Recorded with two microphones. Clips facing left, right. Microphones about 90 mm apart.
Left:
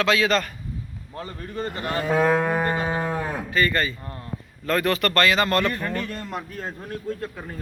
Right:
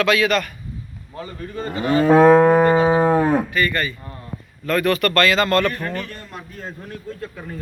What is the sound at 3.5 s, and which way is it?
A man's voice, 30° left (ahead or behind).